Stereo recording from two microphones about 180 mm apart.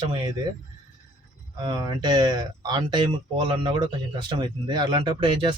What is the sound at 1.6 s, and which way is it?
A man's voice, 25° right (ahead or behind).